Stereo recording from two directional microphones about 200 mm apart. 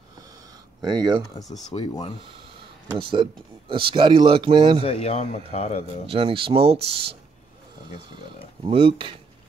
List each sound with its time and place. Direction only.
0.8 s speech: 20° right (ahead or behind)
1.7 s speech: 20° left (ahead or behind)
3.0 s speech: 25° right (ahead or behind)
4.8 s speech: 30° left (ahead or behind)
6.0 s speech: 30° right (ahead or behind)
8.6 s speech: 25° right (ahead or behind)